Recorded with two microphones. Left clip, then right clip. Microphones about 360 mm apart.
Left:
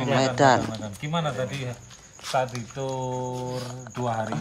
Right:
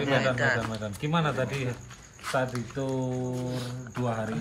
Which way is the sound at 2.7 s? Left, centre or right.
Centre.